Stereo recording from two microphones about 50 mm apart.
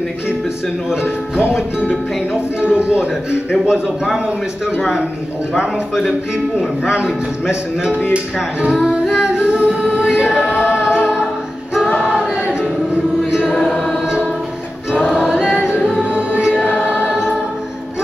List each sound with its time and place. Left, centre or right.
2.3 s a man's voice: right
3.6 s music: centre
6.9 s music: centre
9.9 s choir: right
10.6 s music: right
12.0 s choir: centre
15.0 s choir: centre
15.9 s music: right
16.8 s choir: right